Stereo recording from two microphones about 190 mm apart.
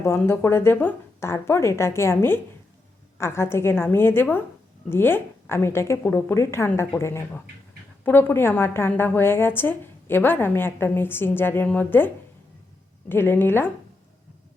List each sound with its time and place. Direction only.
0.0 s a woman's voice: 15° left (ahead or behind)